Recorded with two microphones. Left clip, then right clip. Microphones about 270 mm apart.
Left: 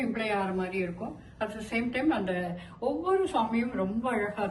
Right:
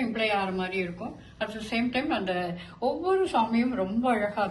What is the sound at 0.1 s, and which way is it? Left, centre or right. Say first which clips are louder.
A woman's voice: right 3 dB; centre.